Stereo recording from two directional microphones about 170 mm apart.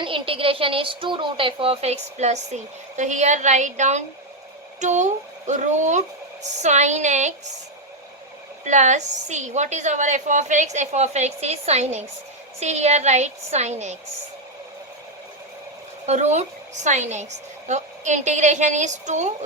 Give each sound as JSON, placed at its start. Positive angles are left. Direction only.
{"t": 0.0, "sound": "a woman's voice", "side_deg": -30}
{"t": 8.6, "sound": "a woman's voice", "side_deg": -45}
{"t": 16.0, "sound": "a woman's voice", "side_deg": -40}